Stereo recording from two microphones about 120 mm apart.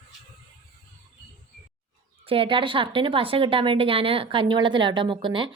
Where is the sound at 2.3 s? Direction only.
50° right (ahead or behind).